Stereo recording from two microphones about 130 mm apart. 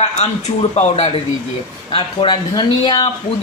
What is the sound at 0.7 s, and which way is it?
Speech, 55° left (ahead or behind).